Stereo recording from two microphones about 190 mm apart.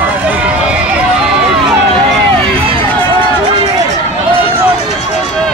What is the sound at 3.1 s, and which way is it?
Run, 25° right (ahead or behind).